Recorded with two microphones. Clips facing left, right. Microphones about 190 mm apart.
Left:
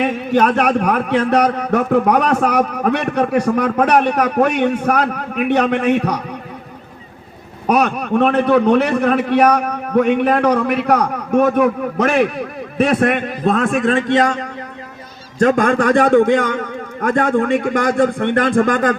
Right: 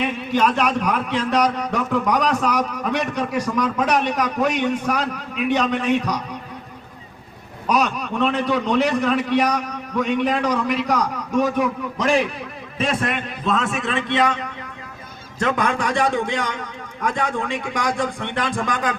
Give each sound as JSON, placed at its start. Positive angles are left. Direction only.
{"t": 0.0, "sound": "a man's voice", "side_deg": 55}
{"t": 7.7, "sound": "a man's voice", "side_deg": 55}